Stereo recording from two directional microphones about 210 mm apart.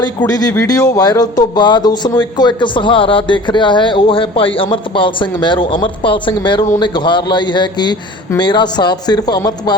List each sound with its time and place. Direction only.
0.2 s speech: 15° left (ahead or behind)